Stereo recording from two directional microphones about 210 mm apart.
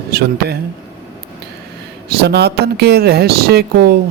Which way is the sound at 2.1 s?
50° right (ahead or behind).